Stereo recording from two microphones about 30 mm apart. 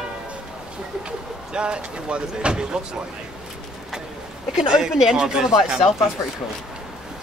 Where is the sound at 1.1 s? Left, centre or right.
Right.